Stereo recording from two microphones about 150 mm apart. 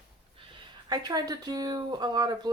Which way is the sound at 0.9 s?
25° right (ahead or behind).